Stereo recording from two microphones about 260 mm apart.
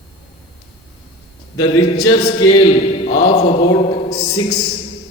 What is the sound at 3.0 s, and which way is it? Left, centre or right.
Mantra, left.